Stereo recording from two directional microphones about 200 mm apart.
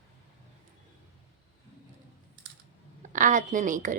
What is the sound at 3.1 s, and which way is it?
Speech, 40° right (ahead or behind).